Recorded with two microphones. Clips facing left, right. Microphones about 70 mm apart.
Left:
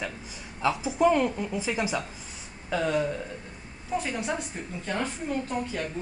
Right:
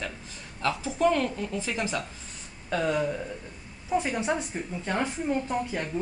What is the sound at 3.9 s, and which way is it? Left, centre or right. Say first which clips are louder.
Speech: right 3 dB; centre.